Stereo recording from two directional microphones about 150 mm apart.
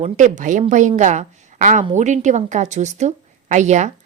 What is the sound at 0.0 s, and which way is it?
A woman's voice, 55° right (ahead or behind).